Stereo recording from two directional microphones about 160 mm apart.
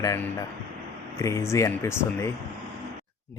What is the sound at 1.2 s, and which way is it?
Speech, 20° left (ahead or behind).